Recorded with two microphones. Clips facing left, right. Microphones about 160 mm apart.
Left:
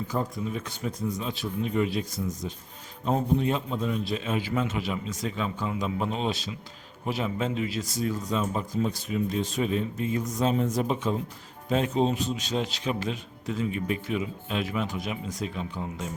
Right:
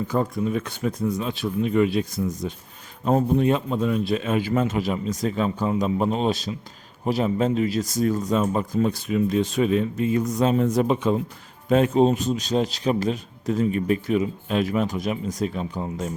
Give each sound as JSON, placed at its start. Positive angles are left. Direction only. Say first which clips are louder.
{"t": 0.1, "sound": "a man's voice", "louder": "right 7 dB", "side_deg": -60}